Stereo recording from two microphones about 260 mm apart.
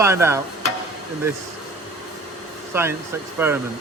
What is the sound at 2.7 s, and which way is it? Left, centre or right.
Speech, centre.